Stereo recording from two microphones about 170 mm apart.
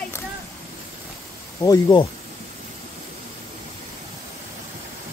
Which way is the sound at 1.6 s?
25° left (ahead or behind).